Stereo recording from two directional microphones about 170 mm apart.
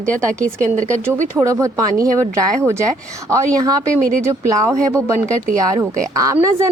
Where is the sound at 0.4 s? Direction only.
10° left (ahead or behind).